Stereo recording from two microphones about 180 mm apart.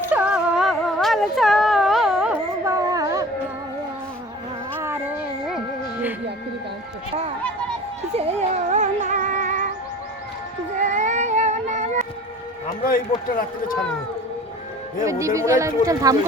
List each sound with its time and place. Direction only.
0.1 s a sound: 5° right (ahead or behind)
2.6 s a sound: 20° right (ahead or behind)
4.7 s music: 10° right (ahead or behind)
8.1 s music: 35° right (ahead or behind)
10.8 s cat: 40° right (ahead or behind)
12.8 s a man's voice: 50° left (ahead or behind)
14.9 s speech: 15° right (ahead or behind)